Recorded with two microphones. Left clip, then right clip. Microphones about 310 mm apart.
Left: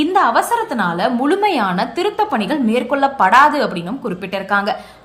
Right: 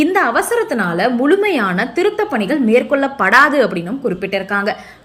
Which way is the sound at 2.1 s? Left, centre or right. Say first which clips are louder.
Even; left.